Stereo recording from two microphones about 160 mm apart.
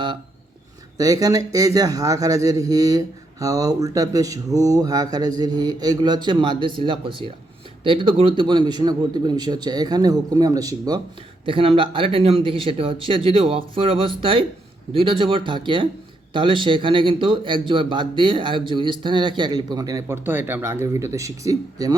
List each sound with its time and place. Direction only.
0.9 s a man's voice: 20° right (ahead or behind)
11.4 s a man's voice: 35° right (ahead or behind)